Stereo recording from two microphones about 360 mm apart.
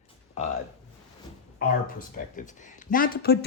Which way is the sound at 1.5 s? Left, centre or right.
Left.